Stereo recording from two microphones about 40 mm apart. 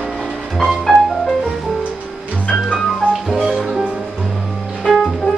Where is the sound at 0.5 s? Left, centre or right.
Centre.